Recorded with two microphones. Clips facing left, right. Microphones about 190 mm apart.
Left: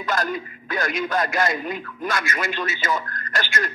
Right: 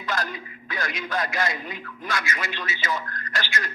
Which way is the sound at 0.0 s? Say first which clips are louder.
Left 5 dB; 50° left (ahead or behind).